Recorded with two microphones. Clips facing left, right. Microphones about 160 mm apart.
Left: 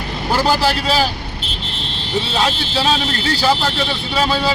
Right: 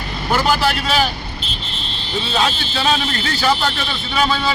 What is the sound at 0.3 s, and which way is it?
Speech, 35° left (ahead or behind).